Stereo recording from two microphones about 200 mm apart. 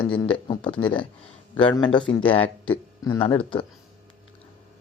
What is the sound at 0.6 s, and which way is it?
Speech, 5° left (ahead or behind).